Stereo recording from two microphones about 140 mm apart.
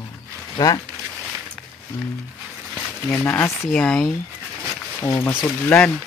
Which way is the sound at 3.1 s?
15° left (ahead or behind).